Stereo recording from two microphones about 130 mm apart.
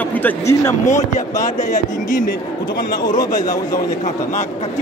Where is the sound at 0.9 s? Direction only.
70° left (ahead or behind).